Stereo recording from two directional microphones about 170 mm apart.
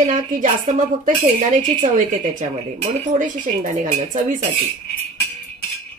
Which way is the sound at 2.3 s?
50° right (ahead or behind).